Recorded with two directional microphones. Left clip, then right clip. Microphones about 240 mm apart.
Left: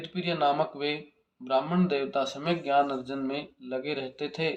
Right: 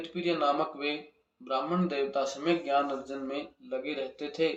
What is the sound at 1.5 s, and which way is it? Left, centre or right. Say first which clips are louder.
Speech: left 4 dB; left.